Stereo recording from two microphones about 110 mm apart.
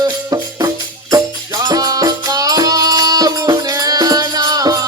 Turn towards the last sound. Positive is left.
turn(degrees=-35)  # may be behind; listen again after turning